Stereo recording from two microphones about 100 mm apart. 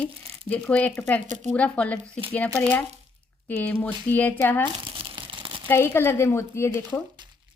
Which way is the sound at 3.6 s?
15° left (ahead or behind).